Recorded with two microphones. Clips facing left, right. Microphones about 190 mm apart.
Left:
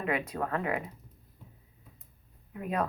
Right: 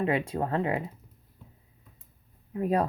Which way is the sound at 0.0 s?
30° right (ahead or behind).